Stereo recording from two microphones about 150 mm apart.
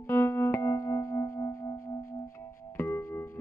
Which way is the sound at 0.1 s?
15° left (ahead or behind).